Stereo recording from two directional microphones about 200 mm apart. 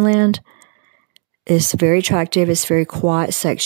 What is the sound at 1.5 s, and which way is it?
Speech, 45° right (ahead or behind).